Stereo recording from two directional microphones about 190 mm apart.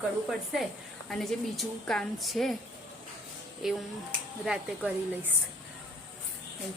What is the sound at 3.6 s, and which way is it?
Speech, centre (ahead or behind).